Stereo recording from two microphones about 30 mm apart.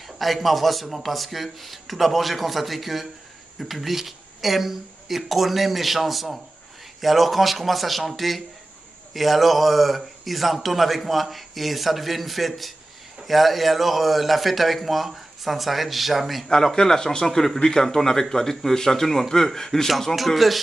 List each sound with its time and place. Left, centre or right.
0.0 s a man's voice: centre
16.4 s a man's voice: left; by 20.5 s centre